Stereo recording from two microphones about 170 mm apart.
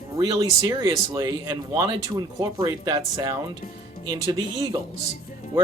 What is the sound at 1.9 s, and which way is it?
Speech, 20° right (ahead or behind).